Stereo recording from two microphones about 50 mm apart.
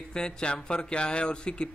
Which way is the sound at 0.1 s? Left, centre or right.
Centre.